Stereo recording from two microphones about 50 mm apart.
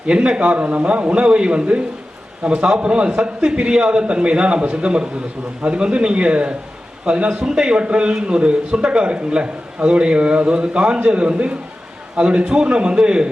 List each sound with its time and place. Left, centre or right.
0.1 s a man's voice: centre